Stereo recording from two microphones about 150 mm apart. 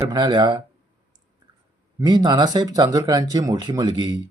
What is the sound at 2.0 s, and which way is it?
Speech, 25° right (ahead or behind).